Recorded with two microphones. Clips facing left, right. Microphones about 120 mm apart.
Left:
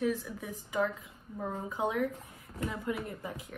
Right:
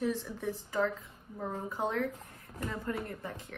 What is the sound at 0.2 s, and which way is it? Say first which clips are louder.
A woman's voice: right 4 dB; 10° left (ahead or behind).